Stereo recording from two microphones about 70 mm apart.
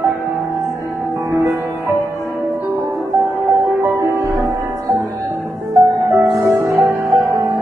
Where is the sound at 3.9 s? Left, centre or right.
Right.